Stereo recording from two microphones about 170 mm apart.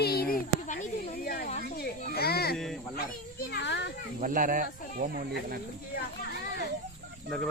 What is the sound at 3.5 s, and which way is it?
Speech, 85° left.